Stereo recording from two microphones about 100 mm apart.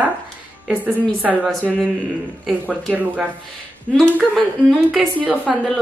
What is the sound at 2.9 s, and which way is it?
Speech, 15° right (ahead or behind).